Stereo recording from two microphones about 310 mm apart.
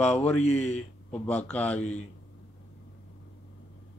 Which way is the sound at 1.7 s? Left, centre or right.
Left.